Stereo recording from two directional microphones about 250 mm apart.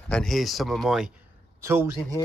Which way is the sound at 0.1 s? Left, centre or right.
Centre.